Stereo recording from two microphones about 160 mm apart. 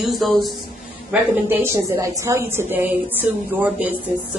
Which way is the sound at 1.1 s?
15° right (ahead or behind).